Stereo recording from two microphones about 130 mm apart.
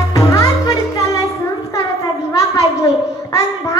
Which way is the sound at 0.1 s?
25° left (ahead or behind).